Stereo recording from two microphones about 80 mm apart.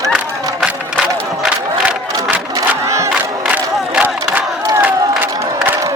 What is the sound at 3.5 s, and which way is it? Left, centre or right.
Crowd, centre.